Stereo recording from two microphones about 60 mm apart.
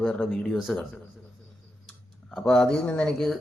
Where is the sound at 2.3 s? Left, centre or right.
Centre.